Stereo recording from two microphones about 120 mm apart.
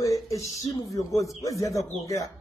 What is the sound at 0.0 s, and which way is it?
Speech, 25° left (ahead or behind).